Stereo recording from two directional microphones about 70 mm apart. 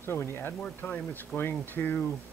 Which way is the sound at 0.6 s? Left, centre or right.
Centre.